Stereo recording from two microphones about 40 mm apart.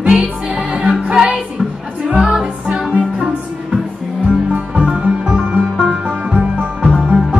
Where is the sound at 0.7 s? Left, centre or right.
Right.